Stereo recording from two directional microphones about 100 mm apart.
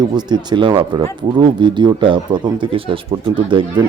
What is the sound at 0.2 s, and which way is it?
Speech, 50° right (ahead or behind).